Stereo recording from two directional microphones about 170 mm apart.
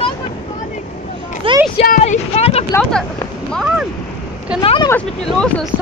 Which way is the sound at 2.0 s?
40° left (ahead or behind).